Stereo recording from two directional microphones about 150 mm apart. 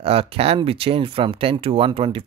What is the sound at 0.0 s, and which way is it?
Speech, 40° right (ahead or behind).